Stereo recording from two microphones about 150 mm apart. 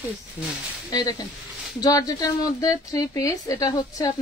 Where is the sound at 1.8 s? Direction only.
25° left (ahead or behind).